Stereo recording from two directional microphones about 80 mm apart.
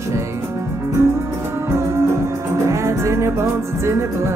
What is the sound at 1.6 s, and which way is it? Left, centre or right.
Music, right.